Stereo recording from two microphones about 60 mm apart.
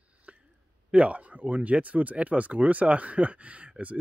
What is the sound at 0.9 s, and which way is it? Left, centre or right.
Speech, right.